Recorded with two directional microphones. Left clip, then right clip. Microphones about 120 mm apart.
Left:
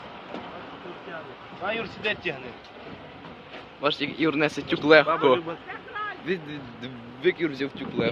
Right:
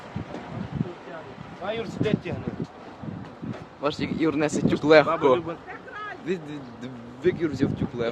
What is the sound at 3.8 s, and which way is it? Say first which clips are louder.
Speech: left 1 dB; 10° right (ahead or behind).